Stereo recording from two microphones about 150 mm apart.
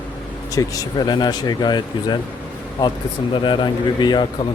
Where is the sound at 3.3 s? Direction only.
30° left (ahead or behind).